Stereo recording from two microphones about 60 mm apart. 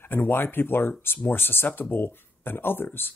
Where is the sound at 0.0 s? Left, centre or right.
Left.